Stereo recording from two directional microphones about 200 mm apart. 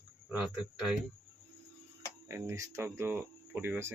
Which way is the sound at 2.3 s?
15° right (ahead or behind).